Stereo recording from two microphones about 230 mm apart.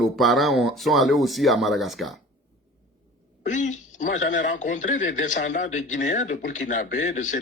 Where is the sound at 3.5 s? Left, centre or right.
Left.